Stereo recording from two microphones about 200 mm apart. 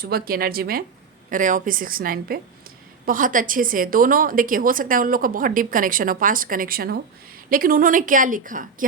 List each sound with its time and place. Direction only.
0.0 s a woman's voice: 50° right (ahead or behind)